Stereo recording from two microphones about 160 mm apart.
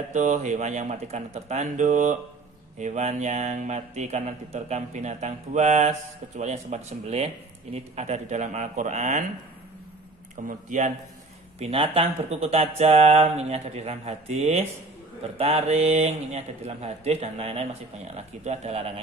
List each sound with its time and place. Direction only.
0.1 s speech: 50° right (ahead or behind)
10.4 s speech: 55° right (ahead or behind)
11.6 s speech: 35° right (ahead or behind)